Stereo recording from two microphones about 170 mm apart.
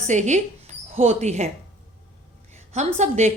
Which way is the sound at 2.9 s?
40° right (ahead or behind).